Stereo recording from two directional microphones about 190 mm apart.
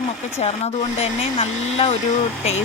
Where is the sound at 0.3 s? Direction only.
35° left (ahead or behind).